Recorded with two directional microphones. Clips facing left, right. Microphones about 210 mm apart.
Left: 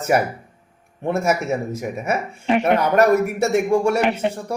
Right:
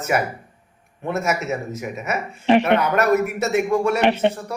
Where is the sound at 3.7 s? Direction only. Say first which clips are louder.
Left 2 dB; 30° left (ahead or behind).